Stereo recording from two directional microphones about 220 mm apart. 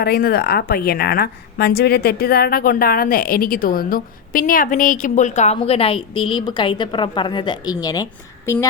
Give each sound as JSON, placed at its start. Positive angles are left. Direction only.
{"t": 0.0, "sound": "a woman's voice", "side_deg": 45}